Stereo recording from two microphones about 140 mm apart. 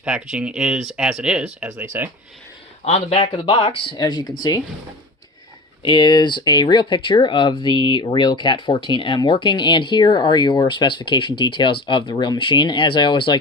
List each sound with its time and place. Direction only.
0.0 s speech: 10° right (ahead or behind)
2.8 s speech: 45° left (ahead or behind); by 4.6 s 30° left (ahead or behind)
5.8 s speech: 30° left (ahead or behind)